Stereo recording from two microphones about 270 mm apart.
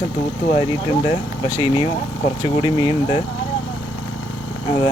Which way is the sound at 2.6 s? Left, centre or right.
Centre.